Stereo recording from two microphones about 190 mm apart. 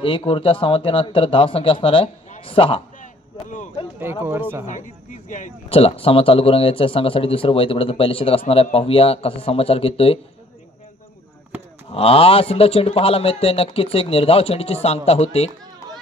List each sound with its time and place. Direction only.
0.0 s speech: 30° left (ahead or behind)
4.0 s speech: 10° right (ahead or behind)
4.6 s a man's voice: 40° left (ahead or behind)
11.9 s a man's voice: 30° left (ahead or behind)